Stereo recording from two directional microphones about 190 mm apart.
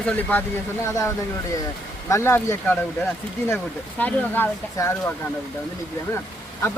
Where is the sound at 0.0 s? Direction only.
10° left (ahead or behind).